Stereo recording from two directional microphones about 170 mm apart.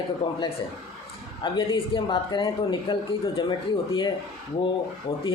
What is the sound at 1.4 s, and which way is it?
Speech, 30° left (ahead or behind).